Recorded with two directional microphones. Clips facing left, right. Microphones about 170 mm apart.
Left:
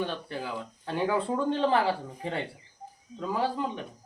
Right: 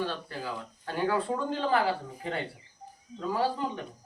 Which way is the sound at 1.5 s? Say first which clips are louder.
Left 3 dB; 25° left (ahead or behind).